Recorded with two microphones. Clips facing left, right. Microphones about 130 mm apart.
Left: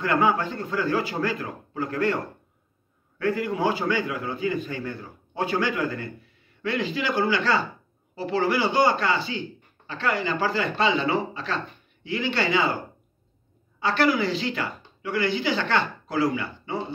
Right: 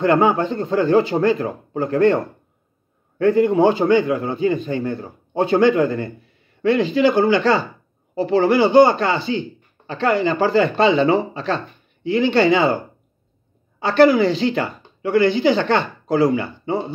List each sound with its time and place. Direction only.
0.0 s a man's voice: 25° right (ahead or behind)
13.7 s speech: 25° right (ahead or behind)